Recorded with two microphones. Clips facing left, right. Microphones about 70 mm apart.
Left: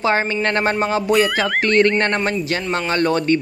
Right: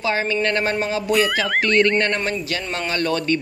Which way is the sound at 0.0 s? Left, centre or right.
Left.